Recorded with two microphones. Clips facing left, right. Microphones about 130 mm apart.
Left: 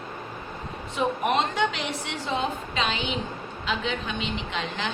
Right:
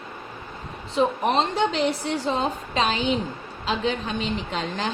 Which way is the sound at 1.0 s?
30° right (ahead or behind).